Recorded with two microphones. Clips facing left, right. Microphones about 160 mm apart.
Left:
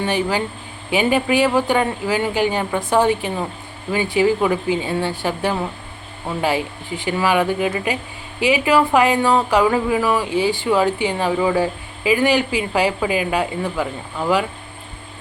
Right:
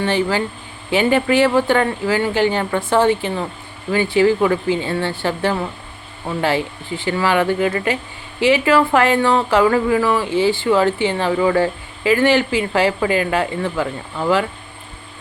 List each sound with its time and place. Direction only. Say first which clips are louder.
0.0 s speech: right 2 dB; 15° left (ahead or behind)